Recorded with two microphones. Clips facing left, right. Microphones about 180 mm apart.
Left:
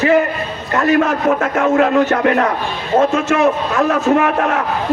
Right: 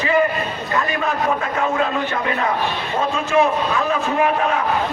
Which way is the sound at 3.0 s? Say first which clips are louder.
Left 4 dB; 80° left.